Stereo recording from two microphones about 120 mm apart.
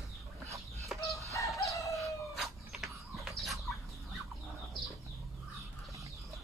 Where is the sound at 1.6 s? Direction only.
25° left (ahead or behind).